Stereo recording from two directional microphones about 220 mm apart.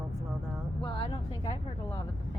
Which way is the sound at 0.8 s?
20° left (ahead or behind).